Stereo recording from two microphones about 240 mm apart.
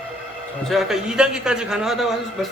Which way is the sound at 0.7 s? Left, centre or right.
Centre.